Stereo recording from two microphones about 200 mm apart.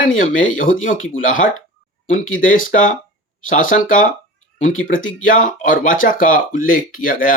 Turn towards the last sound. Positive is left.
turn(degrees=45)  # may be behind; listen again after turning